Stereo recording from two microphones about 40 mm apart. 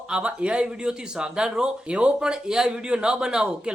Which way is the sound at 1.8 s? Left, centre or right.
Right.